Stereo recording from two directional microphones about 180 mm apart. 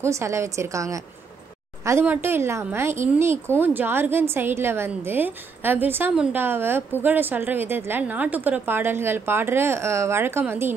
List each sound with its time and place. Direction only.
0.0 s a woman's voice: 15° right (ahead or behind)